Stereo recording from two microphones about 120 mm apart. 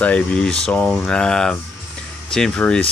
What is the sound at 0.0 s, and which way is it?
Speech, 10° left (ahead or behind).